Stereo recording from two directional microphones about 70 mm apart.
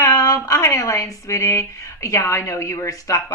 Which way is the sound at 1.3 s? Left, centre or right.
Left.